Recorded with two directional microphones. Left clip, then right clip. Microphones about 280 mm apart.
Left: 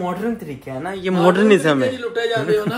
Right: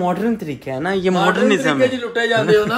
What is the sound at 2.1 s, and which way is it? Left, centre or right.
Speech, right.